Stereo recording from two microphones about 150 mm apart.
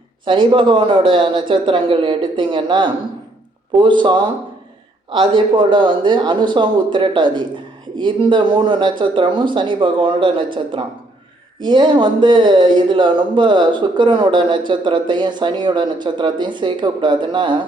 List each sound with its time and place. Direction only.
0.3 s speech: 30° right (ahead or behind)